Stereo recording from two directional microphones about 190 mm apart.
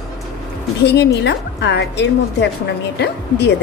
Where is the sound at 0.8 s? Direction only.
65° left (ahead or behind).